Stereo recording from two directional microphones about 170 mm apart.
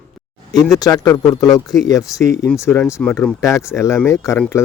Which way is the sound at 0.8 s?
20° left (ahead or behind).